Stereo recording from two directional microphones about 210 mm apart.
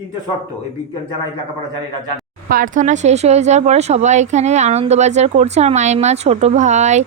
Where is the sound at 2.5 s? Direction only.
40° right (ahead or behind).